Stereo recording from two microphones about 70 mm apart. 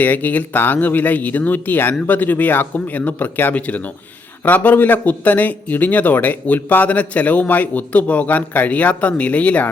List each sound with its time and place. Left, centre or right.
0.0 s speech: left